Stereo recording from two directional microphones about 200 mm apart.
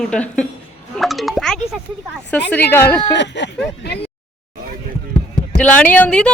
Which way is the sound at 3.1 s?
60° left (ahead or behind).